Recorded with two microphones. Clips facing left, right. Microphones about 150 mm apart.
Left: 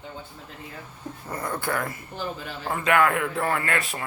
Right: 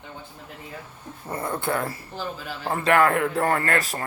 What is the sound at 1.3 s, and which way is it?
A man's voice, 25° right (ahead or behind).